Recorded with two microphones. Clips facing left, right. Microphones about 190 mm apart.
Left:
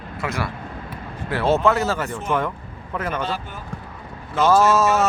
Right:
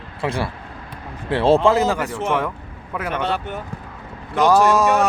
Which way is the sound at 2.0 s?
90° right.